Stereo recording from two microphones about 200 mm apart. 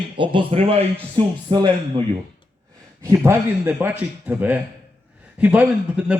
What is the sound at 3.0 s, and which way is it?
A man's voice, 15° right (ahead or behind).